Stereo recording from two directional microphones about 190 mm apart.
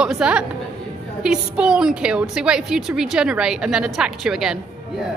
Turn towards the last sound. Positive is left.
turn(degrees=-5)  # may be behind; listen again after turning